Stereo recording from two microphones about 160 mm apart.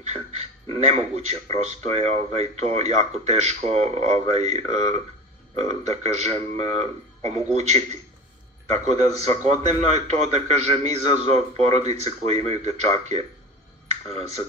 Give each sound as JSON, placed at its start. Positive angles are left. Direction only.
{"t": 0.0, "sound": "a man's voice", "side_deg": -45}